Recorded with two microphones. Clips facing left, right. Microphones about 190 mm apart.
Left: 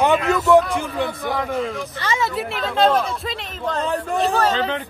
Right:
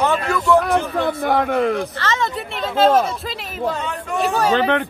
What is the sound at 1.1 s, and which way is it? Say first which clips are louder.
Speech: right 6 dB; 60° right (ahead or behind).